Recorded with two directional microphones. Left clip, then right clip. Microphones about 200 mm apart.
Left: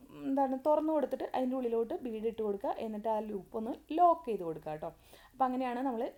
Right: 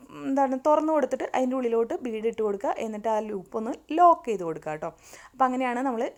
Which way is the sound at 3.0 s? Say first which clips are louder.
Right 7 dB; 10° right (ahead or behind).